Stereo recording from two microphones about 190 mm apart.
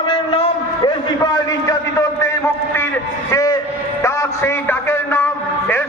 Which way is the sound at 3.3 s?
15° left (ahead or behind).